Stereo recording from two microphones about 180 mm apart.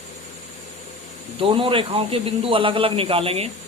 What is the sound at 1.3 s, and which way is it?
A man's voice, 30° right (ahead or behind).